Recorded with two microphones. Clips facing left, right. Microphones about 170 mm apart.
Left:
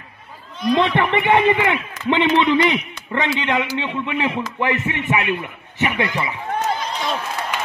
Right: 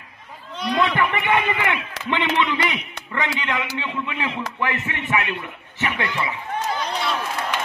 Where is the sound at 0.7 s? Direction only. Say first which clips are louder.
Left 2 dB; 25° left (ahead or behind).